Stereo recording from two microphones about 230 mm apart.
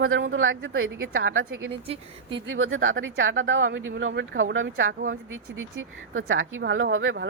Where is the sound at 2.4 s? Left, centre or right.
Right.